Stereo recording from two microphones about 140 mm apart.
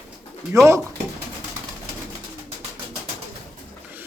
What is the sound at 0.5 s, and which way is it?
Speech, 20° right (ahead or behind).